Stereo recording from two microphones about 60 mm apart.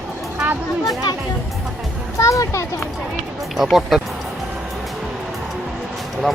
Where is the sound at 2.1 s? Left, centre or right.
Left.